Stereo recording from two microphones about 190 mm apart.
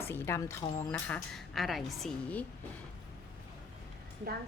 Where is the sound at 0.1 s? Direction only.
15° left (ahead or behind).